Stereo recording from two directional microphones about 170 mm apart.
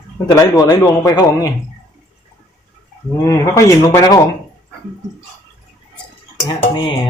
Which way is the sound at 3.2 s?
20° left (ahead or behind).